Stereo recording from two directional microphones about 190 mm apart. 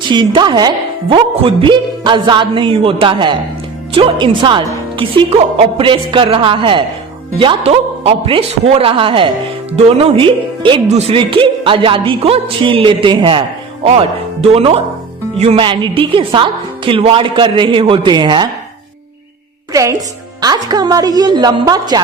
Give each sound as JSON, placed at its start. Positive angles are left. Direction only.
{"t": 0.1, "sound": "speech", "side_deg": -25}
{"t": 19.7, "sound": "a woman's voice", "side_deg": -15}